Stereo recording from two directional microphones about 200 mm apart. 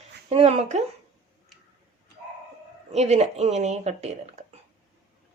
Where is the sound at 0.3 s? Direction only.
30° right (ahead or behind).